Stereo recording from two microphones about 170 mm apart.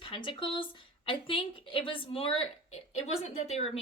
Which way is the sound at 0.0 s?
30° left (ahead or behind).